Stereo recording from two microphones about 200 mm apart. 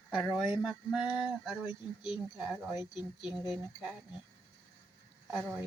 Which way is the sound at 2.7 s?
20° left (ahead or behind).